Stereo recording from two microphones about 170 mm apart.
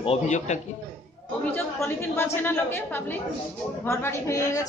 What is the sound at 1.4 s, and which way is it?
A man's voice, 10° left (ahead or behind).